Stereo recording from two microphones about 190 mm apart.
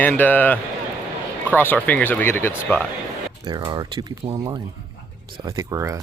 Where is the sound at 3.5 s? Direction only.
20° right (ahead or behind).